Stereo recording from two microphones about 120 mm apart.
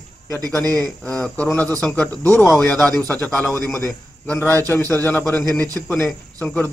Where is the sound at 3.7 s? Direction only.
5° left (ahead or behind).